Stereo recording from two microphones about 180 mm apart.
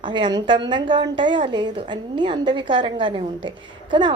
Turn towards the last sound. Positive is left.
turn(degrees=-25)  # may be behind; listen again after turning